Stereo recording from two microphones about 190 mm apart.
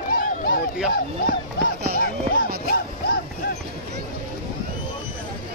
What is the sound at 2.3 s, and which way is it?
Music, 50° left (ahead or behind).